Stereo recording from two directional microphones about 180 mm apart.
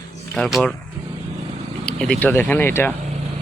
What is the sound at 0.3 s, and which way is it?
Speech, 5° left (ahead or behind).